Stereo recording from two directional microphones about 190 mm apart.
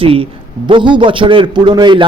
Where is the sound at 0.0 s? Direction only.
30° right (ahead or behind).